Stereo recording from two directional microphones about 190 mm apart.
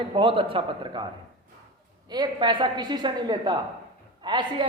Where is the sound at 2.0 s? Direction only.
20° right (ahead or behind).